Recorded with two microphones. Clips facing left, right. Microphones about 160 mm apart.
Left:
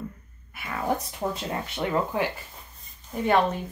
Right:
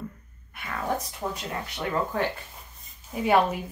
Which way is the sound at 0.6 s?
5° left (ahead or behind).